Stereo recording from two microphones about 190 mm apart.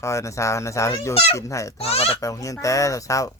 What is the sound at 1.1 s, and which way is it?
Goose, 30° left (ahead or behind).